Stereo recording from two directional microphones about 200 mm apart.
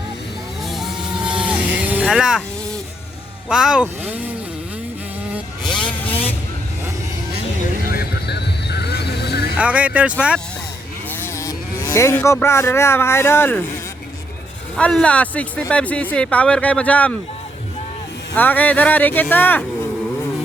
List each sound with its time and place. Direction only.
0.7 s vehicle: centre (ahead or behind)
3.5 s speech: 5° right (ahead or behind)
5.6 s vehicle: 25° left (ahead or behind)
7.9 s vehicle: 50° left (ahead or behind)
9.6 s speech: 5° right (ahead or behind)
11.1 s speech: 15° left (ahead or behind)
14.8 s speech: 5° left (ahead or behind)
18.3 s speech: 10° left (ahead or behind)